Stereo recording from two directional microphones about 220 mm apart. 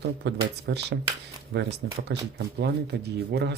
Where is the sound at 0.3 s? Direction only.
50° right (ahead or behind).